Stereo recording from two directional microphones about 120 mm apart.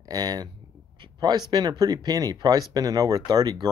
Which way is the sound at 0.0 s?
35° right (ahead or behind).